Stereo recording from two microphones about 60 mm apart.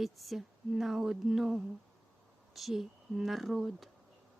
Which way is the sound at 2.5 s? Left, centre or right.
Centre.